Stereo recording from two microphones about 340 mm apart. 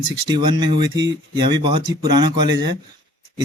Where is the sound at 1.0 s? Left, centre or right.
Right.